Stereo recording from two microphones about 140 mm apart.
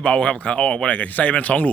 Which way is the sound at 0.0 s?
10° left (ahead or behind).